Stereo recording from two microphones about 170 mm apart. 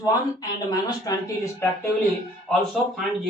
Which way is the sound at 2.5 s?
5° left (ahead or behind).